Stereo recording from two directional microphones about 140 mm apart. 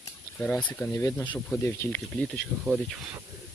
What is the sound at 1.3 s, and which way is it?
Speech, 5° left (ahead or behind).